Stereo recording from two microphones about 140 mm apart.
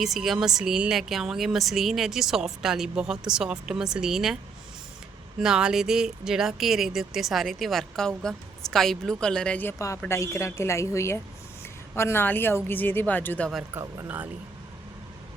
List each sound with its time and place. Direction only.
0.0 s speech: centre (ahead or behind)
5.4 s a woman's voice: 5° right (ahead or behind); by 13.5 s 10° left (ahead or behind)
13.7 s speech: 15° right (ahead or behind)